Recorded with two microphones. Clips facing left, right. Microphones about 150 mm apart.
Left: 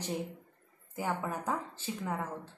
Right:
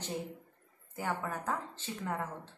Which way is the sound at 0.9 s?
15° left (ahead or behind).